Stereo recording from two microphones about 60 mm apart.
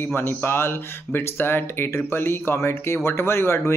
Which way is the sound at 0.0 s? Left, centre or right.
Left.